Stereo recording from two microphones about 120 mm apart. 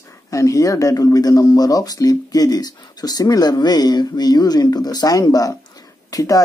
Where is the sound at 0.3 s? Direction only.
25° left (ahead or behind).